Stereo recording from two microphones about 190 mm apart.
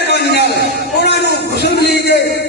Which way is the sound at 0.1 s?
60° left (ahead or behind).